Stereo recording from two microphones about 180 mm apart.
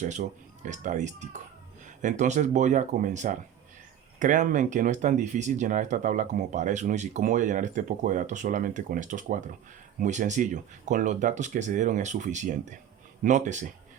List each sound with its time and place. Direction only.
0.0 s speech: 40° right (ahead or behind)